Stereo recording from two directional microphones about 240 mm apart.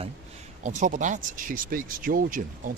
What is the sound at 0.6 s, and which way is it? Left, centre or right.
Speech, right.